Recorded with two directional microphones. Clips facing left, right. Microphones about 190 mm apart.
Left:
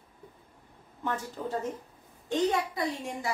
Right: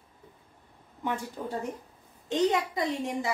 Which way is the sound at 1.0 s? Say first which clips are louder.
Right 1 dB; 15° right (ahead or behind).